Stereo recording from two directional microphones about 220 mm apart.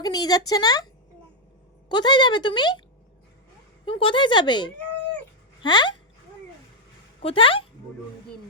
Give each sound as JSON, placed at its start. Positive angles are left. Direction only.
{"t": 0.0, "sound": "a woman's voice", "side_deg": 20}
{"t": 1.9, "sound": "speech", "side_deg": 20}
{"t": 3.8, "sound": "speech", "side_deg": 25}
{"t": 7.2, "sound": "speech", "side_deg": 25}